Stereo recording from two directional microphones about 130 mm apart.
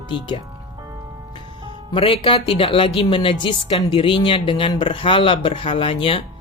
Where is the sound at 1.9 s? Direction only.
45° left (ahead or behind).